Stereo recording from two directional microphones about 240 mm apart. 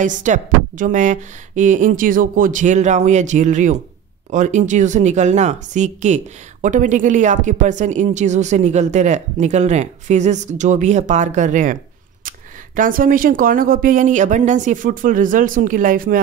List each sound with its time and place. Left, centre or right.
0.0 s speech: right